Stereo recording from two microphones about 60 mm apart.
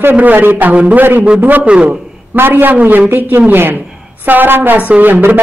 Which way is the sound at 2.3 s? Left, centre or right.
Right.